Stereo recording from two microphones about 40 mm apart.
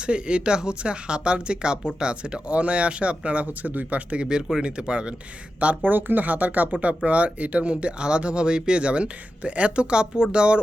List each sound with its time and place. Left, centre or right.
0.0 s speech: right
4.2 s speech: right
5.8 s speech: right